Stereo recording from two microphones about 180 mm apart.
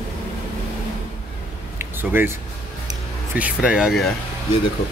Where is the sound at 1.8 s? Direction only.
10° right (ahead or behind).